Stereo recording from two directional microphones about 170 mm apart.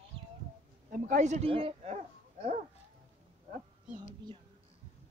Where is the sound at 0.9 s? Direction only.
50° right (ahead or behind).